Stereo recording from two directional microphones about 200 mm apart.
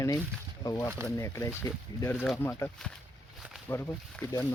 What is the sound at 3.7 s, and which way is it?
Speech, 10° left (ahead or behind).